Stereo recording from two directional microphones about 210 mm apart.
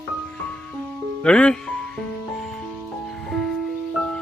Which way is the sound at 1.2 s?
5° left (ahead or behind).